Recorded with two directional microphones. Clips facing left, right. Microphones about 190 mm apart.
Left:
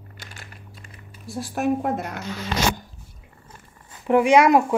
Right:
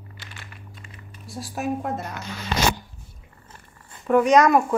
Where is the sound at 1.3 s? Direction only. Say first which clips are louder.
Left 4 dB; 55° left (ahead or behind).